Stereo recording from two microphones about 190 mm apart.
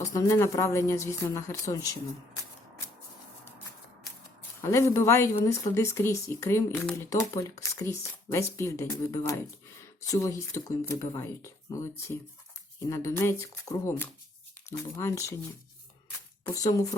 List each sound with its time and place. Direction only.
0.0 s speech: 15° left (ahead or behind)
4.6 s speech: 15° left (ahead or behind)
16.4 s speech: 15° left (ahead or behind)